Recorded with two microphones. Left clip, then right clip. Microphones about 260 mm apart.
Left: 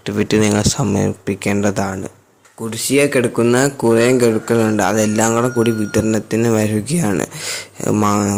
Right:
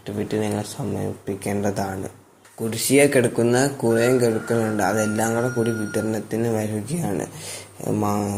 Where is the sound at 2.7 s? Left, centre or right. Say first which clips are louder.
Left 2 dB; left.